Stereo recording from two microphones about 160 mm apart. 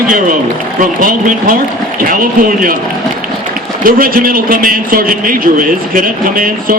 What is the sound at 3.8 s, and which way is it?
A man's voice, 65° right (ahead or behind).